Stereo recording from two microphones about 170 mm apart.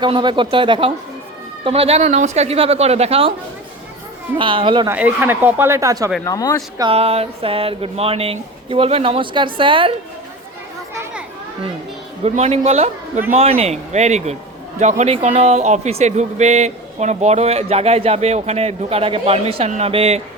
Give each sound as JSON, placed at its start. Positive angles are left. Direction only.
{"t": 0.0, "sound": "speech", "side_deg": -25}
{"t": 4.4, "sound": "speech", "side_deg": -30}
{"t": 4.9, "sound": "speech", "side_deg": -10}
{"t": 6.2, "sound": "speech", "side_deg": 20}
{"t": 6.7, "sound": "speech", "side_deg": -30}
{"t": 12.2, "sound": "speech", "side_deg": -40}